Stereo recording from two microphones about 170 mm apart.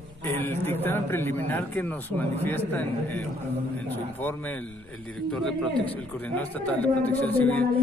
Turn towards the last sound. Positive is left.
turn(degrees=10)  # may be behind; listen again after turning